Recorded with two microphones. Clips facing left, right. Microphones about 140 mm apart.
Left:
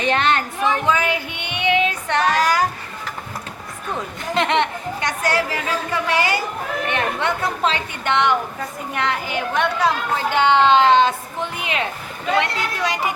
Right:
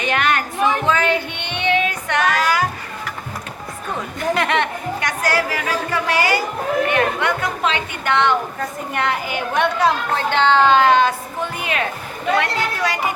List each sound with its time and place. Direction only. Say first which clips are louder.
0.0 s a sound: left 1 dB; 30° left (ahead or behind)
0.9 s music: right 2 dB; 10° left (ahead or behind); by 2.6 s 40° left (ahead or behind)
4.4 s speech: left 5 dB; 20° left (ahead or behind)
8.1 s a woman's voice: right 1 dB; 15° left (ahead or behind)
8.9 s speech: right 1 dB; 5° right (ahead or behind)
10.2 s speech: even; 10° left (ahead or behind)